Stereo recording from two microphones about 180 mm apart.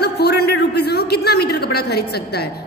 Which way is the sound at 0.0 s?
65° left (ahead or behind).